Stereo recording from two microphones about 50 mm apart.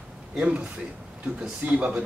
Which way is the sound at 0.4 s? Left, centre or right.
Right.